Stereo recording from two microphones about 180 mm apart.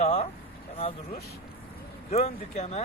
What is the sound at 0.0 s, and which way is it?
Speech, 40° left (ahead or behind).